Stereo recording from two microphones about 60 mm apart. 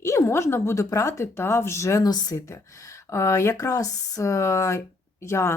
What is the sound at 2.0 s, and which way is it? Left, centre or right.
Speech, left.